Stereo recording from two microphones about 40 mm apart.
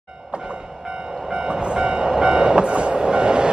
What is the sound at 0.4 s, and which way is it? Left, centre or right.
Vehicle, centre.